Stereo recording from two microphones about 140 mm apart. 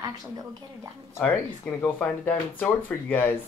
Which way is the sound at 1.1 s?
20° left (ahead or behind).